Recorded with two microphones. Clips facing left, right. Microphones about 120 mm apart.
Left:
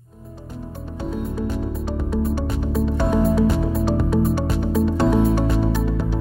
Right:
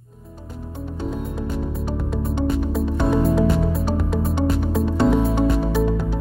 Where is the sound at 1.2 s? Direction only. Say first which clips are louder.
Left 2 dB; centre (ahead or behind).